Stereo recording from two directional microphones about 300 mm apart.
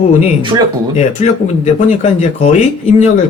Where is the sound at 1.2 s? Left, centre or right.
Left.